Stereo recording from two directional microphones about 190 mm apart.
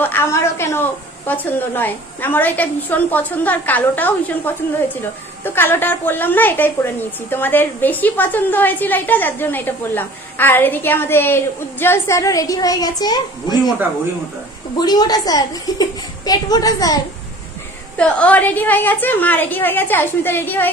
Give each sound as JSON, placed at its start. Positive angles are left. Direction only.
{"t": 0.0, "sound": "speech", "side_deg": 10}
{"t": 5.4, "sound": "speech", "side_deg": 10}
{"t": 14.8, "sound": "a woman's voice", "side_deg": 20}
{"t": 17.9, "sound": "speech", "side_deg": 5}